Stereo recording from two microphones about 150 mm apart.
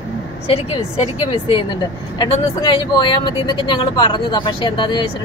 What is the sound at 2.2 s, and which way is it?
Speech, 30° left (ahead or behind).